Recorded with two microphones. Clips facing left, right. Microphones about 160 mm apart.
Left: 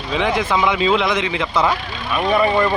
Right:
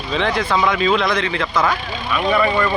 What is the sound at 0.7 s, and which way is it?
Speech, 20° left (ahead or behind).